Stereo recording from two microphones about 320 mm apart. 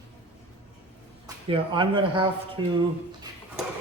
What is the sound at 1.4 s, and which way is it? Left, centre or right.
A man's voice, centre.